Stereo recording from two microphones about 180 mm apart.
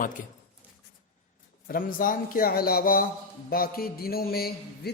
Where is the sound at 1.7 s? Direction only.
50° left (ahead or behind).